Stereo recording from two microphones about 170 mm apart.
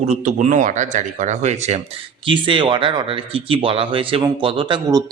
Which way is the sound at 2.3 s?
30° right (ahead or behind).